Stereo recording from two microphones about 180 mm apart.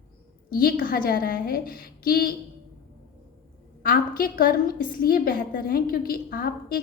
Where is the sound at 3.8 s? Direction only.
55° left (ahead or behind).